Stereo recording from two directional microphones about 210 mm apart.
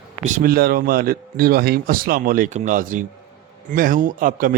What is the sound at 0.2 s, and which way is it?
A man's voice, 35° right (ahead or behind).